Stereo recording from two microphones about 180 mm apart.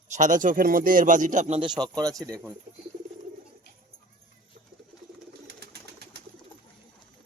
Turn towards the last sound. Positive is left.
turn(degrees=-60)  # may be behind; listen again after turning